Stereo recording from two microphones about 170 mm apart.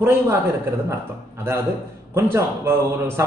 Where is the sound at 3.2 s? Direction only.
15° right (ahead or behind).